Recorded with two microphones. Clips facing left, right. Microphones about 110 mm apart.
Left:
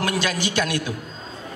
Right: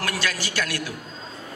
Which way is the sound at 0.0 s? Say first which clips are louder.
Left 5 dB; 20° left (ahead or behind).